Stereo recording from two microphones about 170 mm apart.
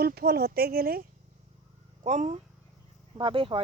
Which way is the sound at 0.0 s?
65° right (ahead or behind).